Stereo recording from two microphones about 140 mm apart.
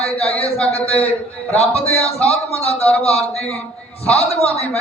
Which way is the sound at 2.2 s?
45° left (ahead or behind).